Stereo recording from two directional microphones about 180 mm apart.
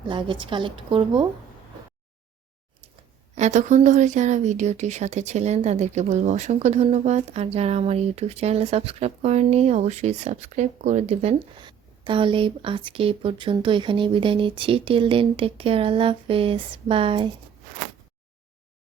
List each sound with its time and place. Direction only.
0.1 s a woman's voice: 25° right (ahead or behind)
3.3 s a woman's voice: 40° right (ahead or behind)